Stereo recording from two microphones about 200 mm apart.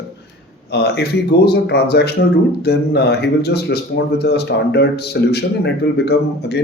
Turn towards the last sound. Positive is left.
turn(degrees=60)  # may be behind; listen again after turning